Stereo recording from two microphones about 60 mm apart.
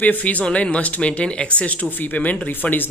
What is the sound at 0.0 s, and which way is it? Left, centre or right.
Speech, left.